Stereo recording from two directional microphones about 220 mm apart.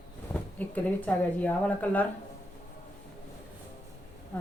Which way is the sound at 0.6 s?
5° left (ahead or behind).